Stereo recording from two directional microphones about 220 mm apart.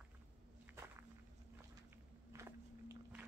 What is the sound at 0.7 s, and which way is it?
Walk, 10° right (ahead or behind).